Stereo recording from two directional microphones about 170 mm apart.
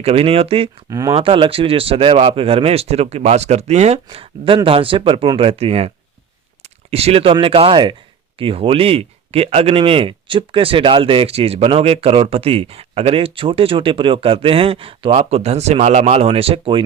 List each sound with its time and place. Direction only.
0.0 s speech: 35° right (ahead or behind)
0.9 s speech: 20° right (ahead or behind)
1.1 s speech: 30° right (ahead or behind)